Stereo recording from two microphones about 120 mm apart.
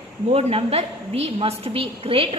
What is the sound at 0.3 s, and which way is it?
A woman's voice, 55° right (ahead or behind).